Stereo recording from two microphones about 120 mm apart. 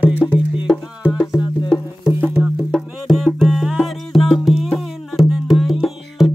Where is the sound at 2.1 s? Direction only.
10° right (ahead or behind).